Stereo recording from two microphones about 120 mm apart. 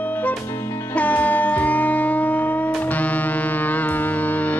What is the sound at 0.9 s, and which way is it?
Music, 15° left (ahead or behind).